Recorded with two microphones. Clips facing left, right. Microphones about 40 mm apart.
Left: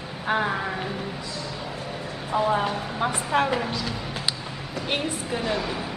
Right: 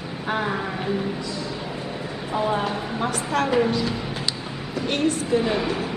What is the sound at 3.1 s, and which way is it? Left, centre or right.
Speech, centre.